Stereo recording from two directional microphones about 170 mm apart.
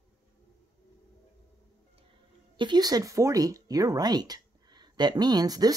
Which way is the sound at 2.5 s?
25° right (ahead or behind).